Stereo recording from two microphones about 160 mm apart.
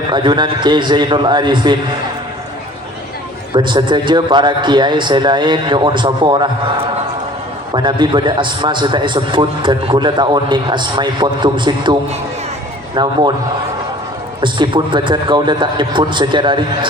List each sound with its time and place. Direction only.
0.1 s a man's voice: 30° right (ahead or behind)
3.5 s a man's voice: 30° right (ahead or behind)
13.0 s a man's voice: 30° right (ahead or behind)
14.4 s a man's voice: 30° right (ahead or behind)